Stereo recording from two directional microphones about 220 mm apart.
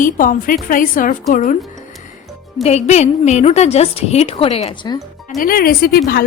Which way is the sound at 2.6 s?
30° left (ahead or behind).